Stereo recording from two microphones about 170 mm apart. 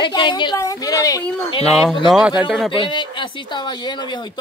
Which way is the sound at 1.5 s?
30° left (ahead or behind).